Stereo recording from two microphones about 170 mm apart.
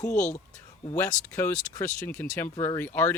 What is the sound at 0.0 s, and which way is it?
Speech, 45° left (ahead or behind).